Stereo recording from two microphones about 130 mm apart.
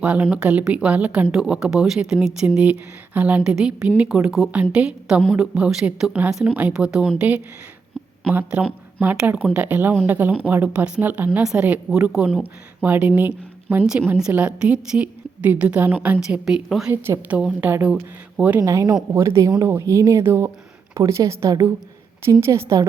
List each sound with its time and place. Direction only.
0.0 s a woman's voice: 10° right (ahead or behind)
16.9 s a woman's voice: 15° right (ahead or behind)
18.6 s speech: 25° right (ahead or behind)